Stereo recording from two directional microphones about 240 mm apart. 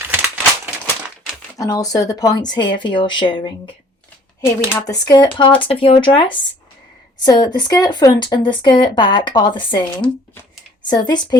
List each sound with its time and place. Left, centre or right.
0.1 s a sound: centre
1.5 s speech: centre
4.7 s speech: centre